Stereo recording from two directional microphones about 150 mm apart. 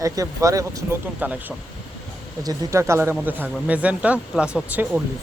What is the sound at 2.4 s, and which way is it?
Speech, 20° right (ahead or behind).